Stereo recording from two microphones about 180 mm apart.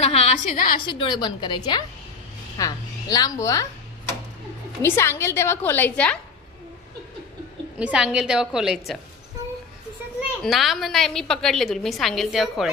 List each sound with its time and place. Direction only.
0.0 s a woman's voice: 35° left (ahead or behind)
0.7 s a woman's voice: 25° left (ahead or behind)
4.8 s a woman's voice: 15° left (ahead or behind)
7.8 s a woman's voice: 5° right (ahead or behind)
10.4 s a woman's voice: centre (ahead or behind)